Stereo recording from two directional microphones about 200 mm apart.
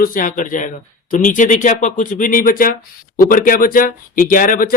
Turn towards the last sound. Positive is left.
turn(degrees=45)  # may be behind; listen again after turning